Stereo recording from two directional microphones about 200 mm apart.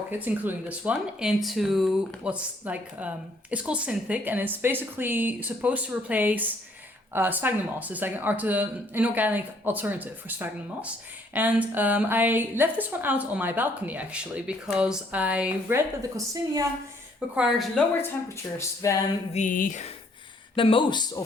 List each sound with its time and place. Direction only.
0.1 s speech: 10° right (ahead or behind)
16.1 s speech: 15° right (ahead or behind)
17.2 s speech: 5° right (ahead or behind)
18.5 s speech: 15° left (ahead or behind)
19.3 s a sound: 40° left (ahead or behind)
20.6 s speech: 25° left (ahead or behind)